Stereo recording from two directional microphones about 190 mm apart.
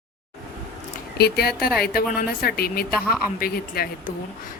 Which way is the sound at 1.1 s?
55° left (ahead or behind).